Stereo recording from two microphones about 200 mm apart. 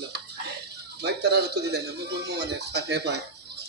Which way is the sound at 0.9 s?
55° right (ahead or behind).